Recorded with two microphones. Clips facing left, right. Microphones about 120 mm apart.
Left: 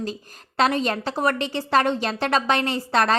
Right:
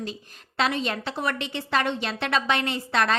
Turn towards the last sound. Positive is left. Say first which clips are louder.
# left 3 dB
turn(degrees=40)  # may be behind; listen again after turning